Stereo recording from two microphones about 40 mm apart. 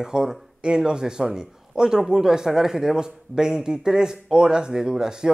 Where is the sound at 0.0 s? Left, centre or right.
Centre.